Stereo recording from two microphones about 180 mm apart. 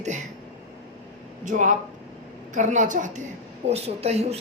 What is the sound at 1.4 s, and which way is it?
A woman's voice, 45° right (ahead or behind).